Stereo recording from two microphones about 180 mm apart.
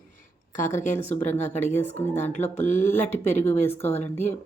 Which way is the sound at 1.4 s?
40° left (ahead or behind).